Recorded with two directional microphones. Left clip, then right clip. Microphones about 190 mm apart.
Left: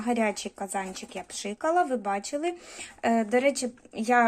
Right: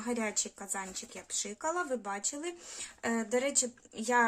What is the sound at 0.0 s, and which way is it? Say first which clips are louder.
Speech: left 7 dB; centre (ahead or behind).